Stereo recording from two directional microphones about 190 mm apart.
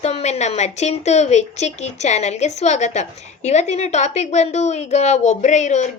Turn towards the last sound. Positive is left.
turn(degrees=40)  # may be behind; listen again after turning